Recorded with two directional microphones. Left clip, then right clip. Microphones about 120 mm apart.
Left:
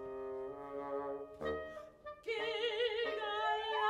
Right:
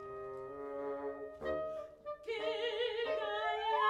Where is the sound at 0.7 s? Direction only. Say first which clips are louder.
Right 1 dB; 35° left (ahead or behind).